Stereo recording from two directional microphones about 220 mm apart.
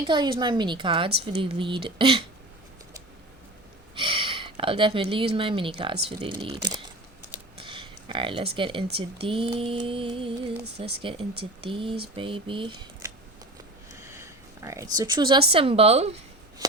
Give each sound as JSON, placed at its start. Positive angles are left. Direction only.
{"t": 0.1, "sound": "speech", "side_deg": -20}
{"t": 3.9, "sound": "speech", "side_deg": -25}
{"t": 14.0, "sound": "a sound", "side_deg": -15}
{"t": 14.9, "sound": "speech", "side_deg": -20}